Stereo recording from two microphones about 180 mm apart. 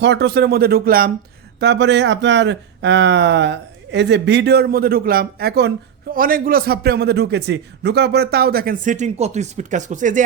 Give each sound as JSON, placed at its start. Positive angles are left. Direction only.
{"t": 0.0, "sound": "speech", "side_deg": -70}
{"t": 1.5, "sound": "speech", "side_deg": -70}